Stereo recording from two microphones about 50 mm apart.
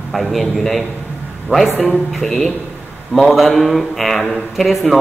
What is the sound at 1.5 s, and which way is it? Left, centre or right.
Speech, right.